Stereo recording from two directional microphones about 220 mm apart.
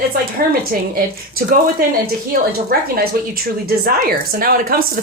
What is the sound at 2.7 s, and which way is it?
A woman's voice, 45° right (ahead or behind).